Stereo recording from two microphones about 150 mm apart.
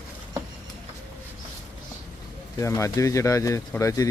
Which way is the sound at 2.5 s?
20° left (ahead or behind).